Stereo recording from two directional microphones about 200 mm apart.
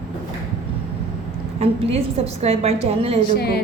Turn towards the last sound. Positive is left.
turn(degrees=50)  # may be behind; listen again after turning